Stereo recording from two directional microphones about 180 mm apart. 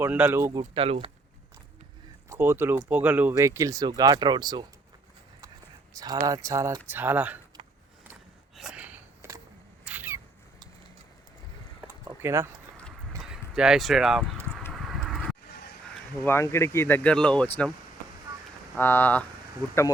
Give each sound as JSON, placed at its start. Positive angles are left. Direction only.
{"t": 0.0, "sound": "speech", "side_deg": -10}
{"t": 0.6, "sound": "speech", "side_deg": -30}
{"t": 2.3, "sound": "speech", "side_deg": -10}
{"t": 5.9, "sound": "speech", "side_deg": -20}
{"t": 8.5, "sound": "a sound", "side_deg": -5}
{"t": 12.0, "sound": "a sound", "side_deg": -15}
{"t": 13.2, "sound": "speech", "side_deg": -5}
{"t": 14.3, "sound": "horse", "side_deg": 10}
{"t": 16.2, "sound": "speech", "side_deg": 15}
{"t": 18.8, "sound": "speech", "side_deg": 10}